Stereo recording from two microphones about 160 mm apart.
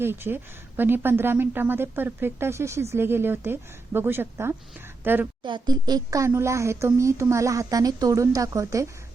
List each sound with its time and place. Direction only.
0.0 s speech: 15° right (ahead or behind)
5.4 s speech: 30° right (ahead or behind)